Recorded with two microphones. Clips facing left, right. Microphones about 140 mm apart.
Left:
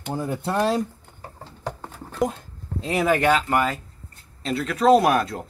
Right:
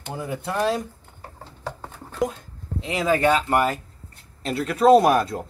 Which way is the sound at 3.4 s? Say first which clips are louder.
Right 1 dB; centre (ahead or behind).